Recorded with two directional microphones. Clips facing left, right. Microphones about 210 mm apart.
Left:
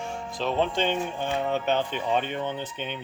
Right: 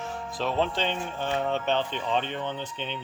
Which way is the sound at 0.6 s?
15° left (ahead or behind).